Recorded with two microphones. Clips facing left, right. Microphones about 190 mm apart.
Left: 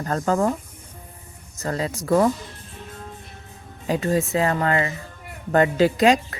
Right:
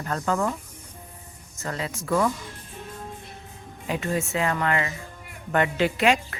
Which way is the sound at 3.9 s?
35° left (ahead or behind).